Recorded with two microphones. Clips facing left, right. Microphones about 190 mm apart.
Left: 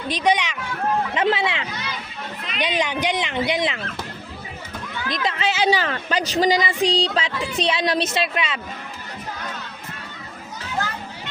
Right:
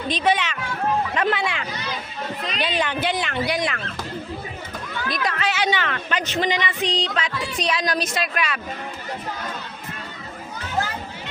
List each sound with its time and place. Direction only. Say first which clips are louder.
0.1 s speech: left 1 dB; 15° left (ahead or behind)
1.1 s a woman's voice: left 2 dB; 25° left (ahead or behind)
5.0 s a woman's voice: left 1 dB; 20° left (ahead or behind)